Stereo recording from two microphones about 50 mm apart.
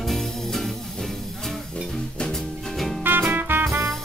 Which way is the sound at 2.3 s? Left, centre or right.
Centre.